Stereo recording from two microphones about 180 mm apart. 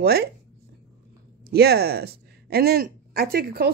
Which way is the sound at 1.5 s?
60° right (ahead or behind).